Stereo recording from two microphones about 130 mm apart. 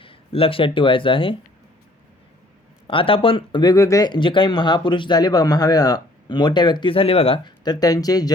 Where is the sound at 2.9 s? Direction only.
45° left (ahead or behind).